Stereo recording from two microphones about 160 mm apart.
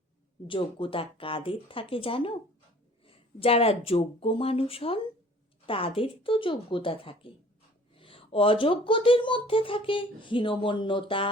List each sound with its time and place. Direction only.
0.4 s speech: 35° left (ahead or behind)